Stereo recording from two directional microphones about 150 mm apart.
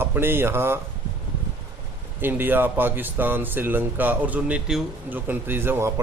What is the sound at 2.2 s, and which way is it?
Speech, 15° right (ahead or behind).